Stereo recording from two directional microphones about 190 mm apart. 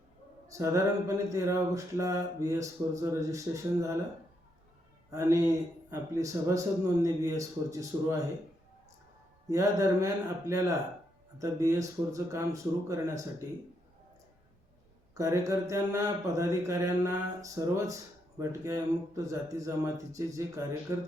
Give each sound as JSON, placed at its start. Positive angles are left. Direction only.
{"t": 0.4, "sound": "music", "side_deg": -15}
{"t": 5.1, "sound": "music", "side_deg": -15}
{"t": 9.5, "sound": "music", "side_deg": -15}
{"t": 15.1, "sound": "music", "side_deg": -15}